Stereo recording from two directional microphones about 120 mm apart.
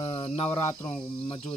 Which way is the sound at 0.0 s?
50° left (ahead or behind).